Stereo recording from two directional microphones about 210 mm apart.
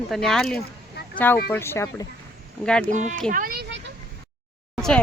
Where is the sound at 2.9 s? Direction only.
35° right (ahead or behind).